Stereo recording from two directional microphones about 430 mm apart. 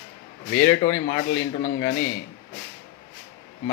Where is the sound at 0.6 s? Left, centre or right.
Centre.